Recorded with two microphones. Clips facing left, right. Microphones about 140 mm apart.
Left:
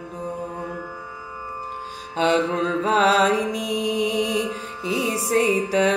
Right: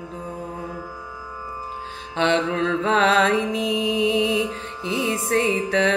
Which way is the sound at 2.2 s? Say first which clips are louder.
Left 1 dB; 40° left (ahead or behind).